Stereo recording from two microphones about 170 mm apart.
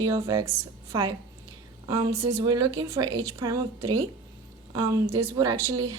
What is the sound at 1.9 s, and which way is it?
A woman's voice, 20° right (ahead or behind).